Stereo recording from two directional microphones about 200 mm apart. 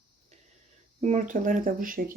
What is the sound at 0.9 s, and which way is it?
Speech, 35° right (ahead or behind).